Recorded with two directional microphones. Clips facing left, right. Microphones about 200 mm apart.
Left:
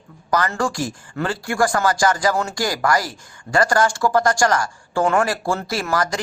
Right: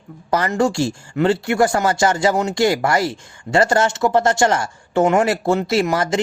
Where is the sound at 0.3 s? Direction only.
25° right (ahead or behind).